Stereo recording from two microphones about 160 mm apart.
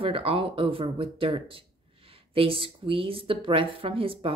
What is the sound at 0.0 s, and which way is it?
A woman's voice, 35° right (ahead or behind).